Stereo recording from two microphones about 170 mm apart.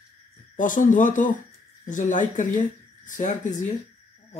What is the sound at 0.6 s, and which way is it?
Speech, 50° left (ahead or behind).